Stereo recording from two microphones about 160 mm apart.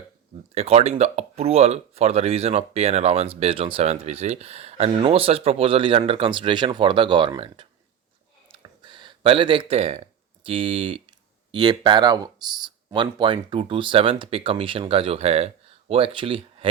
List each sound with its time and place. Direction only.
0.5 s speech: 40° right (ahead or behind)
8.5 s a sound: 30° right (ahead or behind)
11.5 s speech: 30° right (ahead or behind)